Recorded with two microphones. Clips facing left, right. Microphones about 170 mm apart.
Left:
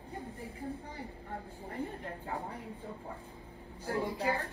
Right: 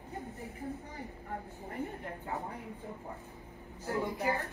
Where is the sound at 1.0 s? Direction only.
30° left (ahead or behind).